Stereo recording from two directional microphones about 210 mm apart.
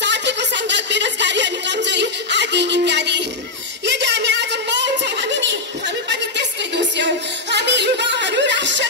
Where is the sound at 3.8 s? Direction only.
55° right (ahead or behind).